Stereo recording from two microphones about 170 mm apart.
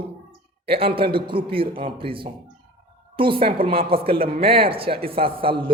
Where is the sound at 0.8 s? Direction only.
30° right (ahead or behind).